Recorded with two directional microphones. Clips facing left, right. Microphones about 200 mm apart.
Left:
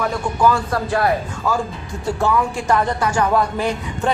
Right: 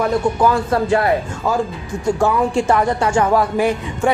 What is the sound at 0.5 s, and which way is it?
Speech, 25° right (ahead or behind).